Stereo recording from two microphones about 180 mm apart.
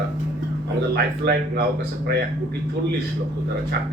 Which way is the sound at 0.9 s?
65° right (ahead or behind).